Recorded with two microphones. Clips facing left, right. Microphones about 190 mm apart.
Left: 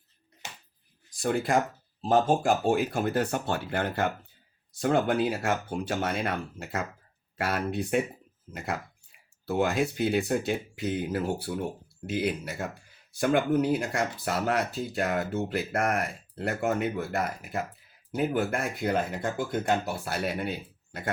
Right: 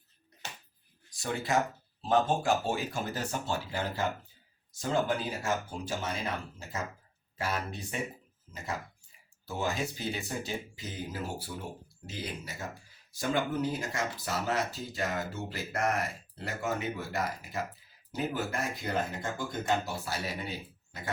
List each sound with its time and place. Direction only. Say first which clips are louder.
1.2 s speech: left 5 dB; 55° left (ahead or behind)